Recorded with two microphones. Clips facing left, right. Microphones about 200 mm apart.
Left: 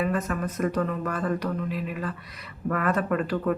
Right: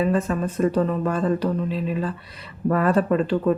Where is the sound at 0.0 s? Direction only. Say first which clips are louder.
Right 5 dB; 30° right (ahead or behind).